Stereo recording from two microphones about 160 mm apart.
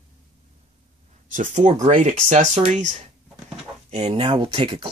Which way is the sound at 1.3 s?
50° right (ahead or behind).